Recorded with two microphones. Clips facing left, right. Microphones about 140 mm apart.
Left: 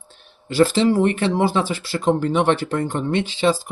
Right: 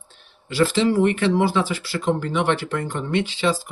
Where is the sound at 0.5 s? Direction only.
35° left (ahead or behind).